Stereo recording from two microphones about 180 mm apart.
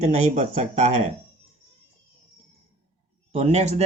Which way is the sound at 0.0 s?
40° right (ahead or behind).